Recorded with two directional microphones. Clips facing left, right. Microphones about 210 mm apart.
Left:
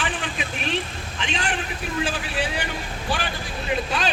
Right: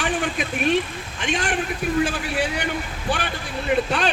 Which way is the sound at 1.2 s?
45° right (ahead or behind).